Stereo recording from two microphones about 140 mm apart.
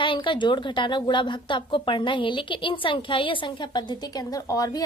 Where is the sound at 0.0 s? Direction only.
35° left (ahead or behind).